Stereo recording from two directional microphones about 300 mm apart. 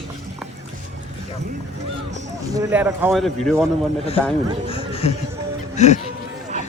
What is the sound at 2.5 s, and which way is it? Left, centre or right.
A man's voice, centre.